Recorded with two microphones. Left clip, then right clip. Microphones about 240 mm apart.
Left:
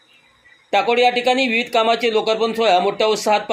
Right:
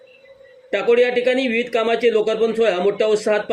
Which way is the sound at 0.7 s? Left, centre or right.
Centre.